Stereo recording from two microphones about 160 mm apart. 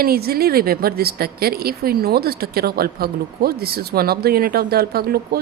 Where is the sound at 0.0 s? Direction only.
70° right (ahead or behind).